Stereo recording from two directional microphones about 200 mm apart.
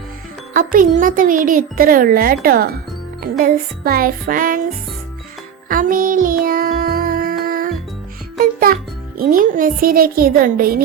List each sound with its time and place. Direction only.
0.5 s speech: 45° right (ahead or behind)
5.6 s music: 45° right (ahead or behind)
8.4 s a child's voice: 45° right (ahead or behind)